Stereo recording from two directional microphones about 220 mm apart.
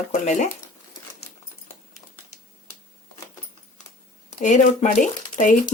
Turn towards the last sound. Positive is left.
turn(degrees=35)  # may be behind; listen again after turning